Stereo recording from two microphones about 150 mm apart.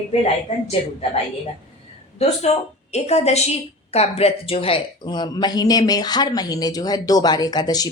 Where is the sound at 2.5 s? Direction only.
50° left (ahead or behind).